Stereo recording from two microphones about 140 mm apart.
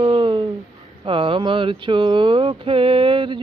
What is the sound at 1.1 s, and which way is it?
Mantra, 35° right (ahead or behind).